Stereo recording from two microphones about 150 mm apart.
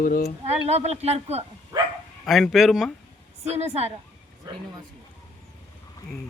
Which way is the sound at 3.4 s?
45° right (ahead or behind).